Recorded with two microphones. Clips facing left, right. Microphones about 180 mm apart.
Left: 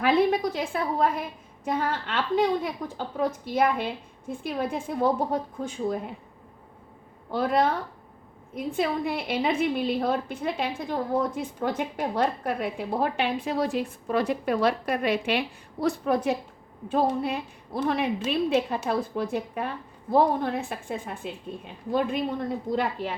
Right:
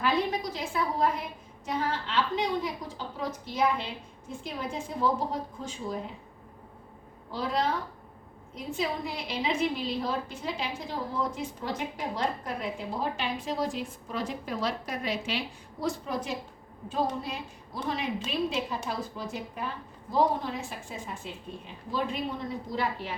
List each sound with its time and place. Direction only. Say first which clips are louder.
0.0 s a woman's voice: left 6 dB; 55° left (ahead or behind)
7.3 s a woman's voice: left 6 dB; 55° left (ahead or behind)